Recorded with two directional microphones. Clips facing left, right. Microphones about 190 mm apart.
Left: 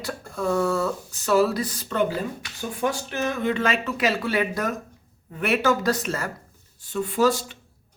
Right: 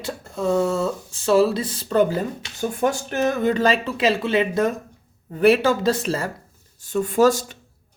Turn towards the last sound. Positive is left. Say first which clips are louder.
# right 4 dB
turn(degrees=-45)  # may be behind; listen again after turning